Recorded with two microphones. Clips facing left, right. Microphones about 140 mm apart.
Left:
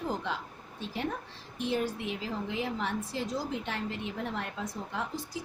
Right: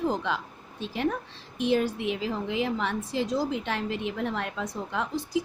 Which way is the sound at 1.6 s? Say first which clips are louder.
Right 6 dB; 90° right.